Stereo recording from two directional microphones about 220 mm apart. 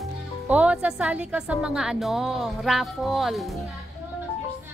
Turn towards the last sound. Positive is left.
turn(degrees=0)  # may be behind; listen again after turning